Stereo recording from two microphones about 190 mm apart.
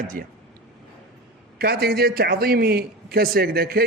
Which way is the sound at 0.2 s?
45° right (ahead or behind).